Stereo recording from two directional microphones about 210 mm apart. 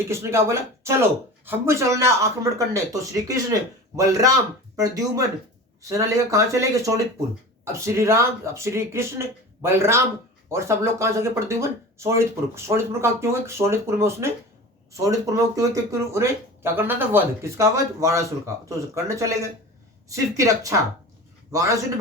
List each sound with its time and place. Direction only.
0.1 s speech: 15° right (ahead or behind)